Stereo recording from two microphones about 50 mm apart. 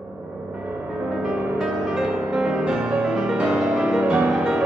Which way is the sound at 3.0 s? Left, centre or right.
Centre.